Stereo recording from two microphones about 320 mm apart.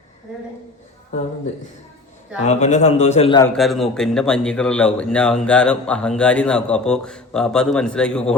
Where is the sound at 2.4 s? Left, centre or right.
Left.